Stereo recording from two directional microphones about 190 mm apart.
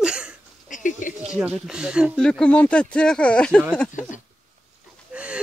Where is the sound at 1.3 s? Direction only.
5° right (ahead or behind).